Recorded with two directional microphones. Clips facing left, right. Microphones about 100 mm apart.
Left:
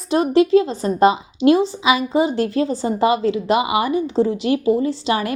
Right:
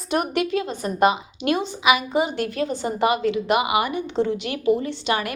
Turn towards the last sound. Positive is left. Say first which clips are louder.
# left 5 dB
turn(degrees=30)  # may be behind; listen again after turning